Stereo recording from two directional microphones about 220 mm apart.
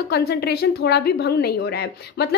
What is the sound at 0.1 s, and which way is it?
A woman's voice, 45° left (ahead or behind).